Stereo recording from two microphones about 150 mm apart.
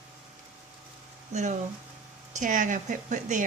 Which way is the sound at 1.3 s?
50° right (ahead or behind).